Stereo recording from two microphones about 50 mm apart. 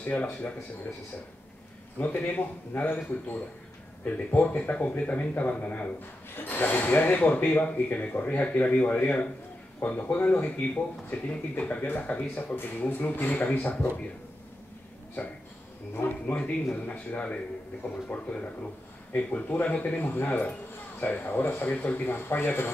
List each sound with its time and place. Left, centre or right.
0.0 s speech: left
2.0 s speech: left
4.0 s speech: left
9.8 s speech: left
10.1 s speech: left
12.8 s speech: left
16.3 s speech: left